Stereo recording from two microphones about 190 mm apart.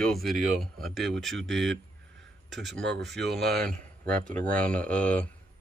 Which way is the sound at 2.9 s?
65° right (ahead or behind).